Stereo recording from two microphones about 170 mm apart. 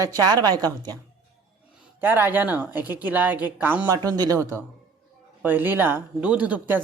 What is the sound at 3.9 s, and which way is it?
Speech, 20° right (ahead or behind).